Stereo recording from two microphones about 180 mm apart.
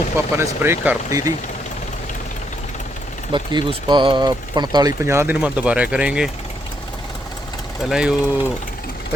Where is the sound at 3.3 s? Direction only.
25° right (ahead or behind); by 6.3 s 5° right (ahead or behind).